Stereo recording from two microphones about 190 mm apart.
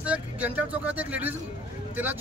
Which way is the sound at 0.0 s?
5° right (ahead or behind).